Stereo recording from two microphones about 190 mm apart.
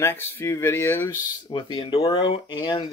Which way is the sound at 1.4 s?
25° left (ahead or behind).